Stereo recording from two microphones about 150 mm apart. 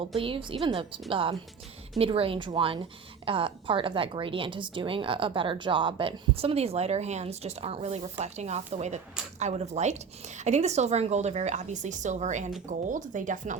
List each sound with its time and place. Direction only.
0.2 s a woman's voice: 35° right (ahead or behind); by 13.6 s 60° right (ahead or behind)